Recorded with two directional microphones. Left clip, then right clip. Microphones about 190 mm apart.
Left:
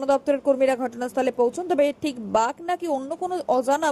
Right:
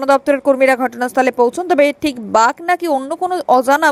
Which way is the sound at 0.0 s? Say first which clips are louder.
Right 8 dB; 20° right (ahead or behind).